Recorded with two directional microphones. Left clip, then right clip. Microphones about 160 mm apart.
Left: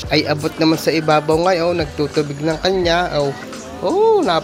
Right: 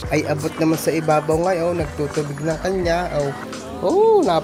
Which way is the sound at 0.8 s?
25° left (ahead or behind).